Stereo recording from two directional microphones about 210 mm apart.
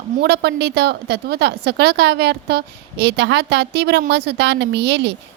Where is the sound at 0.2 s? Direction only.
50° right (ahead or behind).